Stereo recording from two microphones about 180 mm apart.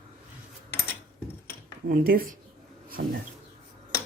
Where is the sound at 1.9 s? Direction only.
55° right (ahead or behind).